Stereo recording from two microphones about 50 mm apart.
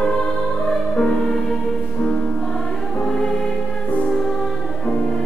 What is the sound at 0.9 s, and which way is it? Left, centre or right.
Music, left.